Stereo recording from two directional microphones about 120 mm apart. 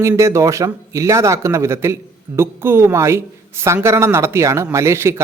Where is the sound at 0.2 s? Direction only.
25° right (ahead or behind).